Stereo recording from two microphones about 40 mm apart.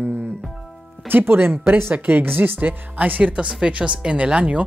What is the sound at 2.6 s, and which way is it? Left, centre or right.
A woman's voice, right.